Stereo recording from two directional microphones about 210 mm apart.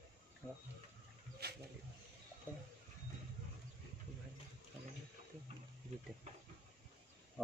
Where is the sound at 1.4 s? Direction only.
50° right (ahead or behind).